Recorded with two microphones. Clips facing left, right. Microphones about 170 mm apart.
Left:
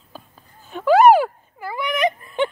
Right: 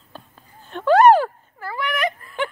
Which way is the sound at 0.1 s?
5° left (ahead or behind).